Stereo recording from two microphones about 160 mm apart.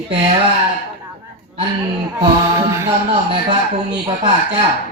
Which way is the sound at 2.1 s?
20° right (ahead or behind).